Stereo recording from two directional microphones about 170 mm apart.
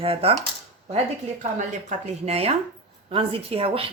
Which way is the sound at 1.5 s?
45° right (ahead or behind).